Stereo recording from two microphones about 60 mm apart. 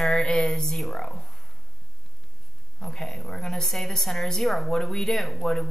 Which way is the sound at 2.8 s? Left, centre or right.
Centre.